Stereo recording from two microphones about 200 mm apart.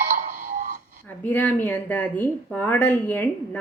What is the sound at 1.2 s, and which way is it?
Speech, 10° left (ahead or behind).